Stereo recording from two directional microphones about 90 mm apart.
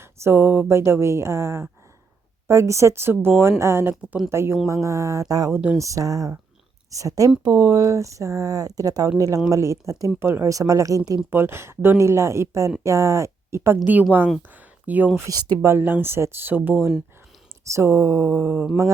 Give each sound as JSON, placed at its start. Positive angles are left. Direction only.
{"t": 0.0, "sound": "speech", "side_deg": -30}
{"t": 11.3, "sound": "speech", "side_deg": -25}
{"t": 13.8, "sound": "speech", "side_deg": -20}
{"t": 14.5, "sound": "a sound", "side_deg": -20}
{"t": 15.3, "sound": "speech", "side_deg": -50}
{"t": 15.6, "sound": "speech", "side_deg": -25}
{"t": 17.7, "sound": "speech", "side_deg": -30}